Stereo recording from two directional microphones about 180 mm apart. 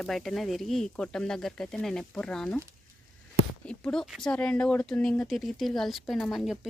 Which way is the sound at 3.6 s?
5° left (ahead or behind).